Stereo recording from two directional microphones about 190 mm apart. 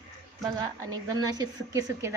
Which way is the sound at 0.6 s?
20° right (ahead or behind).